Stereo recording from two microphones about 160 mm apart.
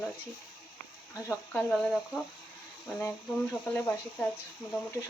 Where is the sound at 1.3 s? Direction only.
10° left (ahead or behind).